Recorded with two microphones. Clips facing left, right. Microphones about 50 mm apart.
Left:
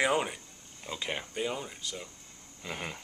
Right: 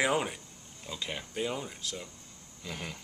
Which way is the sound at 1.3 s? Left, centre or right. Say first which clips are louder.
Even; centre.